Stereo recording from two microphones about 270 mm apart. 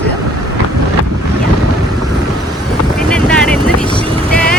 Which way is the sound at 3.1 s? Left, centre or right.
Centre.